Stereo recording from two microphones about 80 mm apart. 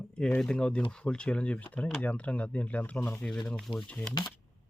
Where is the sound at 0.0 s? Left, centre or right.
Centre.